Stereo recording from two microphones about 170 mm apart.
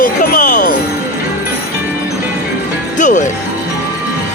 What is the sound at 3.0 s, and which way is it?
Music, 50° left (ahead or behind).